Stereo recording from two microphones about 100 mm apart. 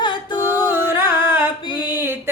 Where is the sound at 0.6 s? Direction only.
20° right (ahead or behind).